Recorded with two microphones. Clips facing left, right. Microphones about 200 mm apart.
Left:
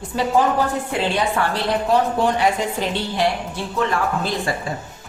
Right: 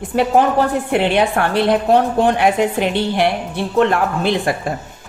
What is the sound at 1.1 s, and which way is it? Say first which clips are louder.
A woman's voice: right 5 dB; 60° right (ahead or behind).